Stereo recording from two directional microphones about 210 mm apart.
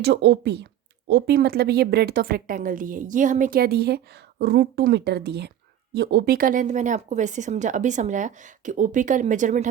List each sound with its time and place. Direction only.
0.0 s speech: 50° right (ahead or behind); by 9.6 s 35° right (ahead or behind)